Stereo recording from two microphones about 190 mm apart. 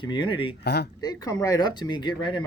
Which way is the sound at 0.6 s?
60° left (ahead or behind).